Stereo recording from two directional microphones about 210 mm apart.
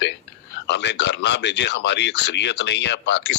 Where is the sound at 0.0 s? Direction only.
55° left (ahead or behind).